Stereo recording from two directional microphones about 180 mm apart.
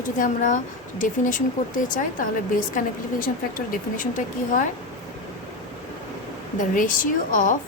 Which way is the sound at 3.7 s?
45° left (ahead or behind).